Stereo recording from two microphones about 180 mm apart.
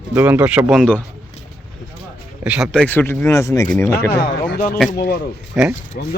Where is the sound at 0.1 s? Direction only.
10° right (ahead or behind).